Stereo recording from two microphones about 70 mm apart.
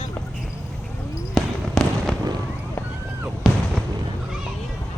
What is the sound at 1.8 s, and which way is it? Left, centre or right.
Fireworks, centre.